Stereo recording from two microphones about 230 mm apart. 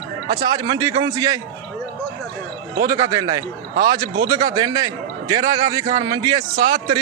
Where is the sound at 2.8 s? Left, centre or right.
Centre.